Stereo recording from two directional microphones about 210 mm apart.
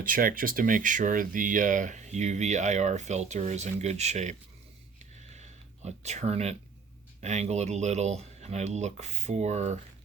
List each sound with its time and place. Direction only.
0.0 s speech: 40° right (ahead or behind)
4.9 s a sound: 35° right (ahead or behind)
7.2 s speech: 30° right (ahead or behind)